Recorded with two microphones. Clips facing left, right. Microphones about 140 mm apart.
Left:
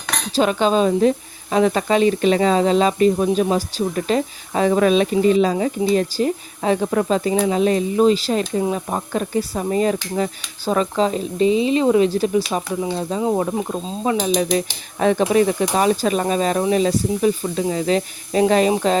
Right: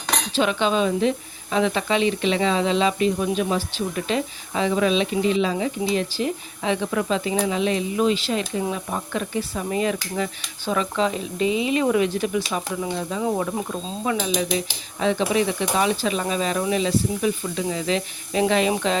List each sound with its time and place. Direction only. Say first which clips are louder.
0.3 s speech: left 5 dB; 40° left (ahead or behind)